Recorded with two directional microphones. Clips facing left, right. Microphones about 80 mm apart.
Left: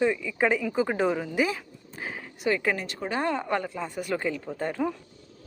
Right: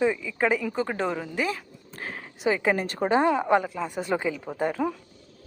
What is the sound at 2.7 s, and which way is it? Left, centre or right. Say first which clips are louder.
Speech: right 6 dB; right.